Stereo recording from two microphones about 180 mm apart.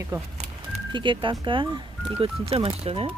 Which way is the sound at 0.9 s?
25° right (ahead or behind).